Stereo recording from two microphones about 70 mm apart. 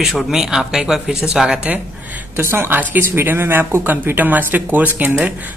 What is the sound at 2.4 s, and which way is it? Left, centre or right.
A woman's voice, right.